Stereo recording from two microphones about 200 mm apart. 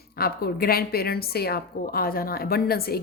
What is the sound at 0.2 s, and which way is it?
A woman's voice, 50° left (ahead or behind).